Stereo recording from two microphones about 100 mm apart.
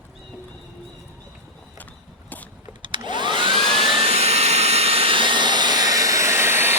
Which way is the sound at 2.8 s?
55° right (ahead or behind).